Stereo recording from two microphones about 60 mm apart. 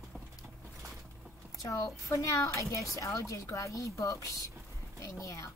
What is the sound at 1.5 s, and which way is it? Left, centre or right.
Speech, left.